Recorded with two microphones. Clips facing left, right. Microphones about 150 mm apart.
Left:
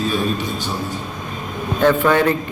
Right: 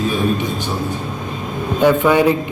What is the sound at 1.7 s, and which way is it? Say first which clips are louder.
Speech: right 2 dB; 15° right (ahead or behind).